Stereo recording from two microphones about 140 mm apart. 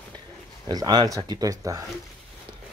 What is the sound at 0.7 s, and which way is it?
Speech, 30° right (ahead or behind).